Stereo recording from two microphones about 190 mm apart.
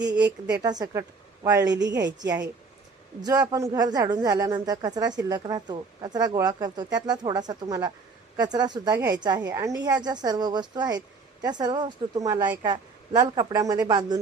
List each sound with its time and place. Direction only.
0.6 s speech: 20° right (ahead or behind)